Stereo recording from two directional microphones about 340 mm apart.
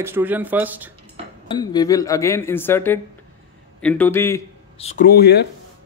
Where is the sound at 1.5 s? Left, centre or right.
Centre.